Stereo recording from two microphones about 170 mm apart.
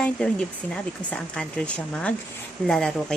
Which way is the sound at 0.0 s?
5° left (ahead or behind).